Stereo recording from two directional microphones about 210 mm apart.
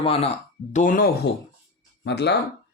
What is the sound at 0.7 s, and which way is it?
Speech, 40° left (ahead or behind).